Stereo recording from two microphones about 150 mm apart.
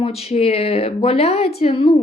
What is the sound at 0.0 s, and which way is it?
Speech, 40° left (ahead or behind).